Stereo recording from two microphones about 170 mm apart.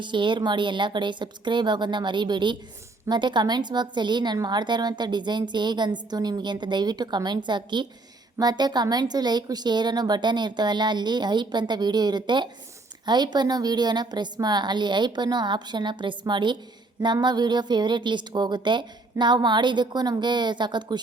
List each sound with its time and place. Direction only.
0.0 s a woman's voice: 30° right (ahead or behind)